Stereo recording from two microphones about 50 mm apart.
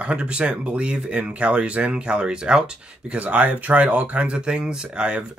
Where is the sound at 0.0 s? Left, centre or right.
Right.